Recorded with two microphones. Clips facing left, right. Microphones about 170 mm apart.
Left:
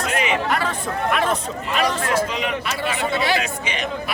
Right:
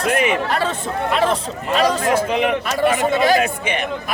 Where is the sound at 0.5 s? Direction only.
30° right (ahead or behind).